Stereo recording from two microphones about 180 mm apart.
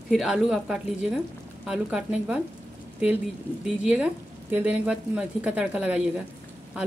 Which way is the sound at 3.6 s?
5° right (ahead or behind).